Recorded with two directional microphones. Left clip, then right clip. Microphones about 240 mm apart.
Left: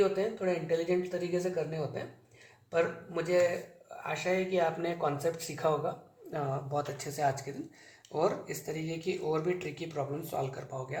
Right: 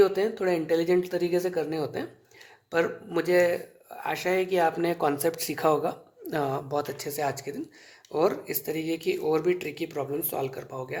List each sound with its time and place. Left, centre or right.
0.0 s speech: right